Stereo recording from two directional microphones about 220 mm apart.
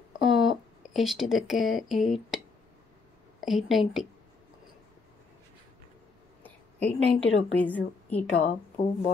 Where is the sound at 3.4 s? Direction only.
Centre (ahead or behind).